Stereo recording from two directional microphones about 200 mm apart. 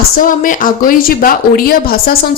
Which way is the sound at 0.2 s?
40° left (ahead or behind).